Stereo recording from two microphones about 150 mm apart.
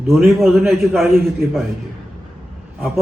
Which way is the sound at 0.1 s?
Centre (ahead or behind).